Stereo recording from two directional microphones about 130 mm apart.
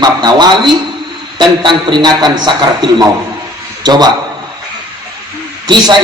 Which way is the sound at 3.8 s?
30° right (ahead or behind).